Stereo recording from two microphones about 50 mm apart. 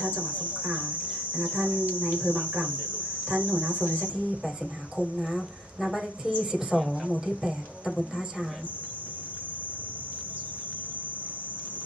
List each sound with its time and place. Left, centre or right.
0.0 s speech: right
5.1 s speech: centre